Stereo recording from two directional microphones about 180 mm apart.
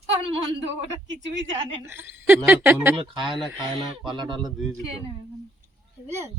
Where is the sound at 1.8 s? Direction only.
10° right (ahead or behind).